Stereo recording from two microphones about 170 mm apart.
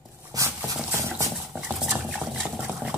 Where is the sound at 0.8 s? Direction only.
10° right (ahead or behind).